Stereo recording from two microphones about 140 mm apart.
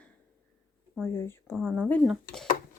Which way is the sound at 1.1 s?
20° left (ahead or behind).